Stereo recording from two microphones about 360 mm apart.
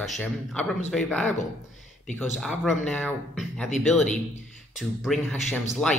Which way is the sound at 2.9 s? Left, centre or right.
Centre.